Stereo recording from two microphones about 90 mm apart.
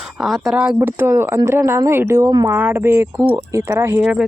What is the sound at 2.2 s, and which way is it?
Speech, 45° right (ahead or behind).